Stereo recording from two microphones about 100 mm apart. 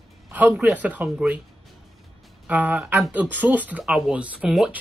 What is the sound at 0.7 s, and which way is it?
Speech, 15° right (ahead or behind).